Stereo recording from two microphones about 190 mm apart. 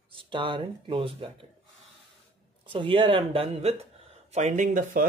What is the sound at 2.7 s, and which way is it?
Speech, 30° right (ahead or behind).